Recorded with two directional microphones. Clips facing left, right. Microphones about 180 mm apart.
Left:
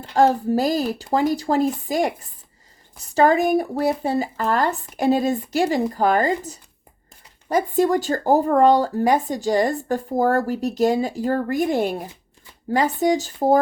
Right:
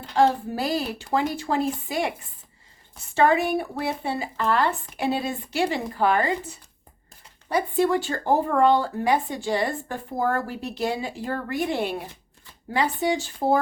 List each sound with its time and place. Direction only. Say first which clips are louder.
0.1 s speech: left 4 dB; 45° left (ahead or behind)